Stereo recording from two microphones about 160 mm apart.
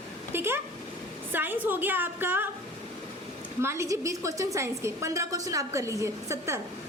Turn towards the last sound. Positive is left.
turn(degrees=-20)  # may be behind; listen again after turning